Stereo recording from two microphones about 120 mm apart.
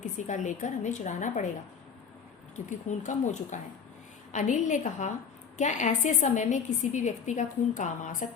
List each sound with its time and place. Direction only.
0.0 s a woman's voice: 90° left
2.6 s a woman's voice: 90° left